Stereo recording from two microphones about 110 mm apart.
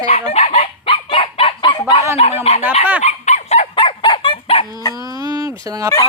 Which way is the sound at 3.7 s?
50° left (ahead or behind).